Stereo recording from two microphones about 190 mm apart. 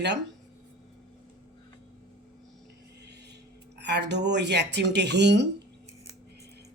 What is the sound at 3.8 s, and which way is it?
Speech, 65° right (ahead or behind).